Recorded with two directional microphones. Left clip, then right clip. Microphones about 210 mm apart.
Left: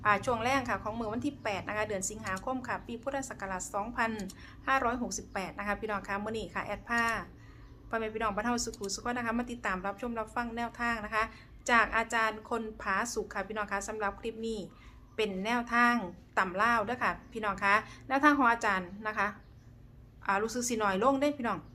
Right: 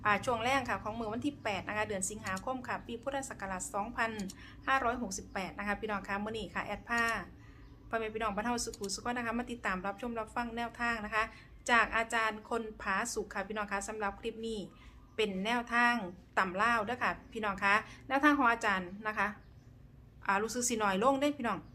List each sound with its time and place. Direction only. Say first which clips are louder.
0.0 s a woman's voice: left 2 dB; centre (ahead or behind)